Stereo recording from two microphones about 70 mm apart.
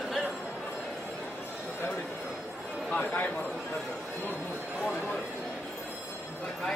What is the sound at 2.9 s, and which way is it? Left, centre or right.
Speech, left.